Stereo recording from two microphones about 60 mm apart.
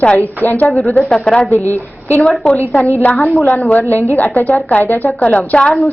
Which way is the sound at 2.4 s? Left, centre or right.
Centre.